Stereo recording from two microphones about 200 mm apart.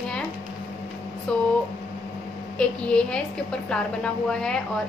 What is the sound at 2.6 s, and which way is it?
A woman's voice, 5° left (ahead or behind).